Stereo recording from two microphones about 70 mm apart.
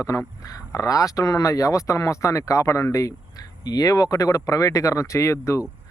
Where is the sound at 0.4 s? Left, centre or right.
Left.